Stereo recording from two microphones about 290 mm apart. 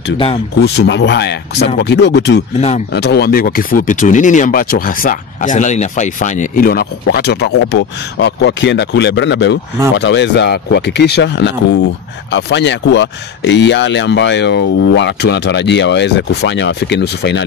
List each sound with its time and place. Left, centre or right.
0.6 s speech: left